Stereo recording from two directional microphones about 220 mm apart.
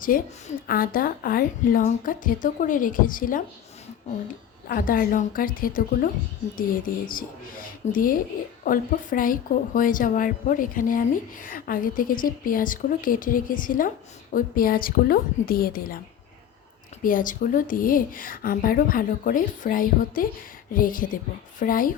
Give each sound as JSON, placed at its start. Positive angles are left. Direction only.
{"t": 0.0, "sound": "speech", "side_deg": 40}
{"t": 4.7, "sound": "speech", "side_deg": 40}
{"t": 17.0, "sound": "speech", "side_deg": 40}